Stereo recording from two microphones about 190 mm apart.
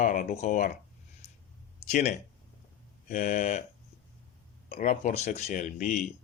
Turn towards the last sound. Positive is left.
turn(degrees=40)  # may be behind; listen again after turning